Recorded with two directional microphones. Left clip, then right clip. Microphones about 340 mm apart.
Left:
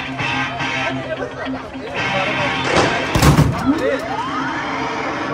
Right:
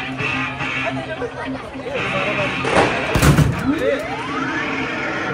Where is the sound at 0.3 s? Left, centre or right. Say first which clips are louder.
Left 3 dB; left.